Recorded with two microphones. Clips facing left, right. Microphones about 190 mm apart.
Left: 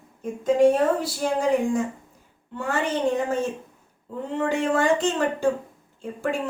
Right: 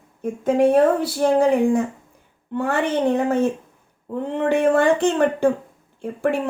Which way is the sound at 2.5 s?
60° right (ahead or behind).